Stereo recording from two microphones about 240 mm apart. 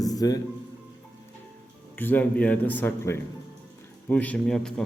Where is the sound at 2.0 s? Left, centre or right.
Centre.